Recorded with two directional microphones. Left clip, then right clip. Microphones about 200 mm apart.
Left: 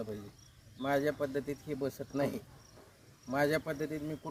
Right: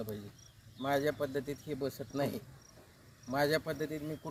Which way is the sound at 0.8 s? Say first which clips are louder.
Left 1 dB; 5° right (ahead or behind).